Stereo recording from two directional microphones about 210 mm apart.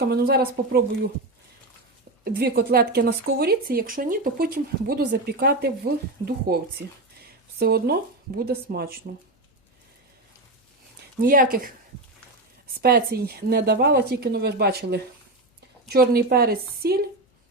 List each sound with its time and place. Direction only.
0.1 s speech: 45° right (ahead or behind)
2.2 s speech: 45° right (ahead or behind)
6.8 s speech: 60° right (ahead or behind)
7.2 s a sound: 50° right (ahead or behind)
8.4 s speech: 50° right (ahead or behind)
11.2 s speech: 40° right (ahead or behind)
12.8 s speech: 50° right (ahead or behind)